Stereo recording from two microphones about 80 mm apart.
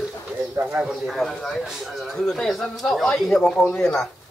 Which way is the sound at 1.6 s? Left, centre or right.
Centre.